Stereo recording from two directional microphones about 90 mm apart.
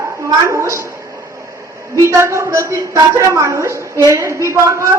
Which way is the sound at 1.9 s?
35° right (ahead or behind).